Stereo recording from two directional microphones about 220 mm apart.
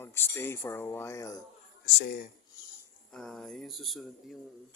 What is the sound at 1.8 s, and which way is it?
Speech, 45° left (ahead or behind).